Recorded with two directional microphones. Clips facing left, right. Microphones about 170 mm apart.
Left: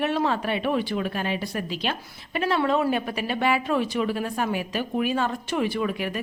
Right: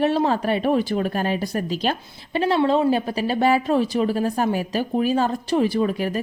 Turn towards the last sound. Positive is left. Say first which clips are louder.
# right 5 dB
turn(degrees=-35)  # may be behind; listen again after turning